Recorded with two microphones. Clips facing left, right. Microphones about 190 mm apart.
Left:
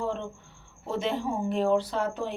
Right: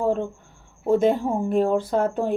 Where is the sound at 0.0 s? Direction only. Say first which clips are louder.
Right 8 dB; 45° right (ahead or behind).